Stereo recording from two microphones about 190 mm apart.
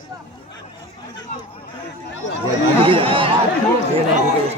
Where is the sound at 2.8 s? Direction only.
30° right (ahead or behind).